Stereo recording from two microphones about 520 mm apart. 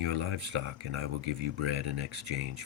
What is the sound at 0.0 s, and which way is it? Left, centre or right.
Speech, right.